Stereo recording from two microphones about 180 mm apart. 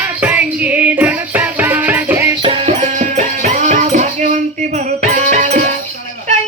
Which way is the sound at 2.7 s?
40° right (ahead or behind).